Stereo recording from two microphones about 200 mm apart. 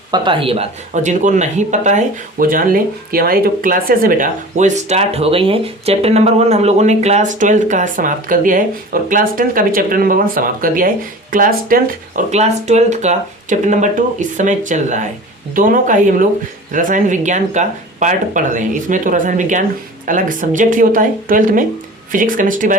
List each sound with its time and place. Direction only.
0.1 s speech: 25° right (ahead or behind); by 22.8 s 40° right (ahead or behind)